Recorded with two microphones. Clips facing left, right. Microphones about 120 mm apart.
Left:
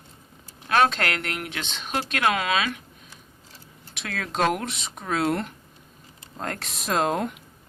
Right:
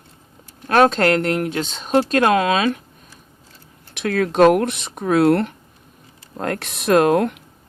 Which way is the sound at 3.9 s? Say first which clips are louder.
Right 12 dB; 50° right (ahead or behind).